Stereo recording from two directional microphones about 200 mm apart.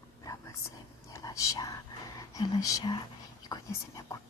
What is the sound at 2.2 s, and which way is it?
Speech, 15° left (ahead or behind).